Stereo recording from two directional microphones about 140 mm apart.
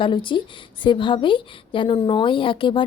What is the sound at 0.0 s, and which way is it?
A woman's voice, 35° left (ahead or behind).